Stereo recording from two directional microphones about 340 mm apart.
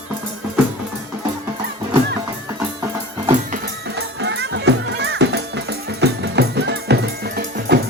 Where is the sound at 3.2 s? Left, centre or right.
Right.